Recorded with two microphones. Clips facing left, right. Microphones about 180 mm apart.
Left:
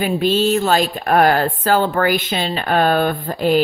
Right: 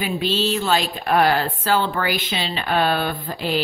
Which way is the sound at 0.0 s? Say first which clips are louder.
Left 6 dB; 45° left (ahead or behind).